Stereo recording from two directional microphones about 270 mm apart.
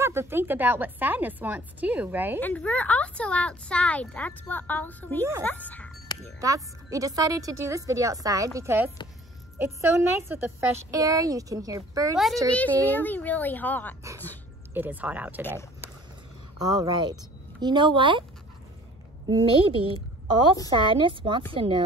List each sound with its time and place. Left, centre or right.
0.0 s a woman's voice: centre
2.4 s speech: centre
5.4 s music: centre
6.4 s a woman's voice: centre
12.5 s a child's voice: centre
14.7 s speech: centre
16.6 s a woman's voice: centre
19.2 s a woman's voice: centre